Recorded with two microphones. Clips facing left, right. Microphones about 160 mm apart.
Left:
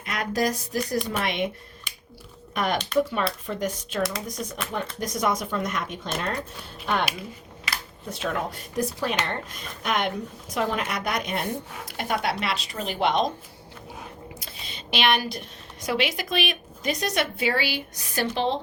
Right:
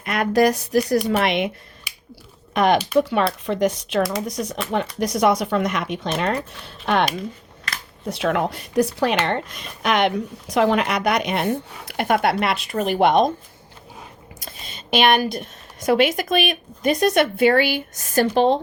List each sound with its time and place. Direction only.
0.0 s a woman's voice: 60° right (ahead or behind)
1.1 s speech: 85° right
1.9 s finger snapping: 10° right (ahead or behind)
2.5 s a woman's voice: 85° right
8.1 s a woman's voice: 80° right; by 13.3 s 55° right (ahead or behind)
14.3 s a woman's voice: 45° right (ahead or behind)